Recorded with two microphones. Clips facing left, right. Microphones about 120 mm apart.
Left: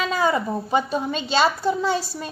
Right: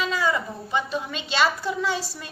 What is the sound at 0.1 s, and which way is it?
A child's voice, 40° left (ahead or behind).